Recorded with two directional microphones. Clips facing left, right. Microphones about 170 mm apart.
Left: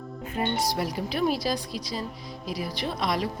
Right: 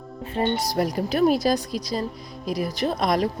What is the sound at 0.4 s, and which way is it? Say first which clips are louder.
Speech: right 5 dB; 30° right (ahead or behind).